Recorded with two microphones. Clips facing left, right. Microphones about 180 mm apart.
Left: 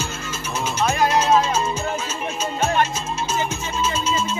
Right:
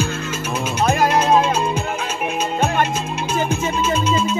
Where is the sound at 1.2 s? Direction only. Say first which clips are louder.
Right 2 dB; 60° right (ahead or behind).